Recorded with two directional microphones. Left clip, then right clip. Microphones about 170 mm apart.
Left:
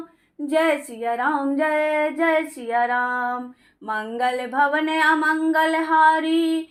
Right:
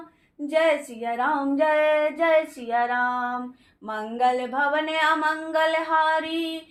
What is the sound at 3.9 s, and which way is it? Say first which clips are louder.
Mantra: even; 35° left (ahead or behind).